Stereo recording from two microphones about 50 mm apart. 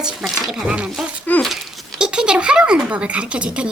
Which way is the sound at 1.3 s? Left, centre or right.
Left.